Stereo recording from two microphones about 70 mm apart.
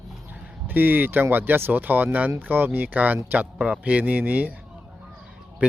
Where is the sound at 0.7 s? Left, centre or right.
Right.